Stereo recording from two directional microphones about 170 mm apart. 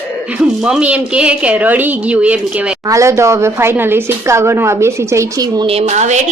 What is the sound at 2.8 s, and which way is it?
Speech, 20° right (ahead or behind).